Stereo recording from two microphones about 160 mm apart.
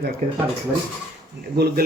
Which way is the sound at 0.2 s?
50° right (ahead or behind).